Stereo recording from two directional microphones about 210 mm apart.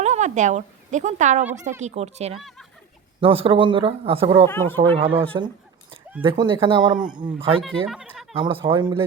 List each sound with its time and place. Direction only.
0.0 s a woman's voice: 35° right (ahead or behind)
4.4 s speech: 10° left (ahead or behind)
4.8 s speech: 25° right (ahead or behind)
7.9 s a sound: centre (ahead or behind)
8.4 s speech: 25° right (ahead or behind)